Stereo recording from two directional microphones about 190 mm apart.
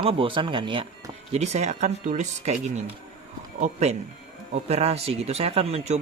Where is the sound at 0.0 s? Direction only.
30° right (ahead or behind).